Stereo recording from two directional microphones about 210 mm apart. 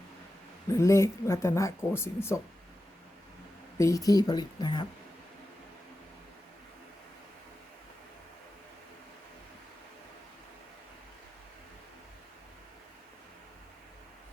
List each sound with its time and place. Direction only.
0.7 s speech: 15° left (ahead or behind)
3.8 s speech: 15° left (ahead or behind)